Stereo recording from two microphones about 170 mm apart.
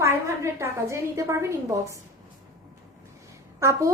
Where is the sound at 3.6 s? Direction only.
15° right (ahead or behind).